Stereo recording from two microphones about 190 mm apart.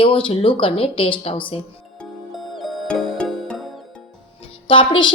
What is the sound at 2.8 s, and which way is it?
Music, 5° left (ahead or behind).